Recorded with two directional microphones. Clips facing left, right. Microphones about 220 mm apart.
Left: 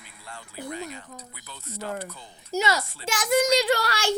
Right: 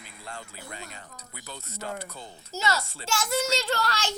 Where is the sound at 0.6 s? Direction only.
20° left (ahead or behind).